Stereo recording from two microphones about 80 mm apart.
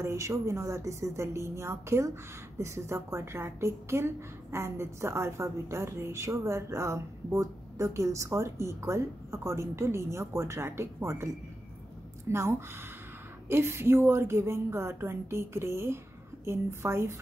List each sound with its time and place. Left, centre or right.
0.0 s a woman's voice: right
12.3 s a woman's voice: right